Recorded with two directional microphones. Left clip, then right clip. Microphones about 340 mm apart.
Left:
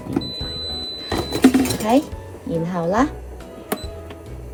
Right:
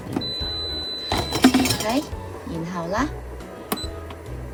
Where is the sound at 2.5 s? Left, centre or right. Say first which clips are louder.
Left 6 dB; centre.